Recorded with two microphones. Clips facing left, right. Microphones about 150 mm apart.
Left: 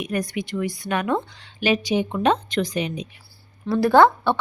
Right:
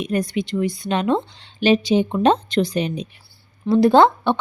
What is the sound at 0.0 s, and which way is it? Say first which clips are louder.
A woman's voice: right 4 dB; 25° right (ahead or behind).